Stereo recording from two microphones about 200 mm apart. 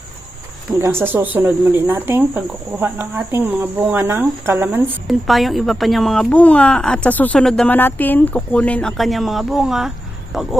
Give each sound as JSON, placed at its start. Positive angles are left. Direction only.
{"t": 0.8, "sound": "speech", "side_deg": -10}
{"t": 5.0, "sound": "speech", "side_deg": 0}